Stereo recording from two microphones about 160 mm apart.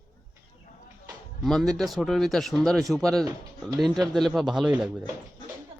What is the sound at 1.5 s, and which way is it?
Speech, 5° left (ahead or behind).